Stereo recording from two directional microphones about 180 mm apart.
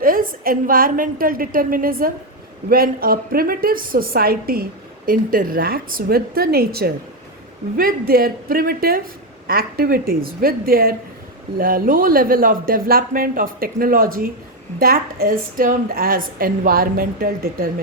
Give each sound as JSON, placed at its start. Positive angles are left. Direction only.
{"t": 0.0, "sound": "a woman's voice", "side_deg": -50}